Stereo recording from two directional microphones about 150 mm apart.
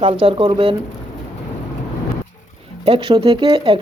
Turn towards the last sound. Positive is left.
turn(degrees=-35)  # may be behind; listen again after turning